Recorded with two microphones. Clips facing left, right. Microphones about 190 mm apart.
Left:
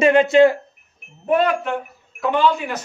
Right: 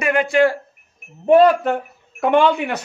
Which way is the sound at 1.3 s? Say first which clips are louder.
Right 6 dB; 35° right (ahead or behind).